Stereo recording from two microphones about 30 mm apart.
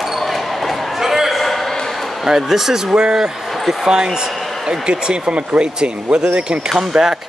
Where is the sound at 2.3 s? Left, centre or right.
Centre.